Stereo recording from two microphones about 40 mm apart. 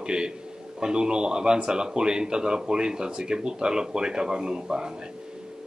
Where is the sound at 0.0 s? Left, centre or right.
Right.